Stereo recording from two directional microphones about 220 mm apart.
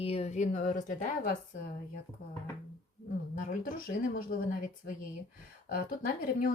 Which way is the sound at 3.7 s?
40° left (ahead or behind).